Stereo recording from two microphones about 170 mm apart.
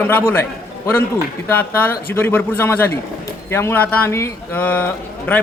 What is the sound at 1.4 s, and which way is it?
Speech, 10° left (ahead or behind).